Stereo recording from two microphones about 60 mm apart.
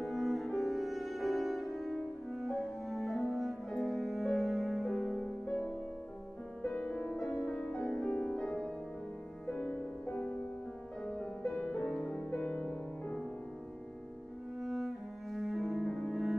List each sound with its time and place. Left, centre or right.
0.0 s music: centre
5.2 s music: left
11.1 s music: centre
14.6 s cello: centre